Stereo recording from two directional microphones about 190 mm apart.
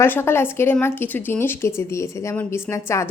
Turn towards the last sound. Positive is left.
turn(degrees=15)  # may be behind; listen again after turning